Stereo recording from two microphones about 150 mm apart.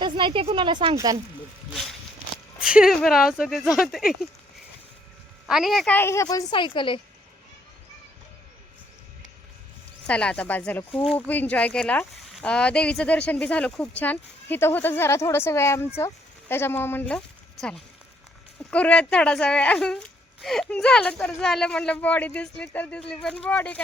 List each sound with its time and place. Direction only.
0.0 s speech: 30° right (ahead or behind)
1.7 s a sound: centre (ahead or behind)
2.6 s speech: 5° right (ahead or behind)
5.5 s speech: centre (ahead or behind)
5.9 s a woman's voice: 15° left (ahead or behind); by 7.0 s 35° left (ahead or behind)
10.1 s speech: 5° left (ahead or behind)